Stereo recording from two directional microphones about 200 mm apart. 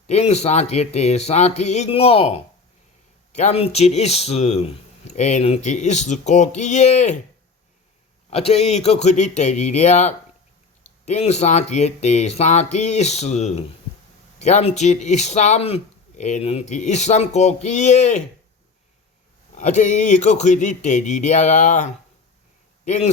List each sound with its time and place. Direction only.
0.1 s speech: 30° left (ahead or behind)
8.3 s speech: 30° left (ahead or behind)
19.5 s speech: 40° left (ahead or behind)
22.9 s speech: 35° left (ahead or behind)